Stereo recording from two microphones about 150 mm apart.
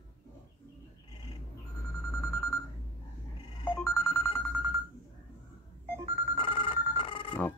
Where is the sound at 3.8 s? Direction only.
20° left (ahead or behind).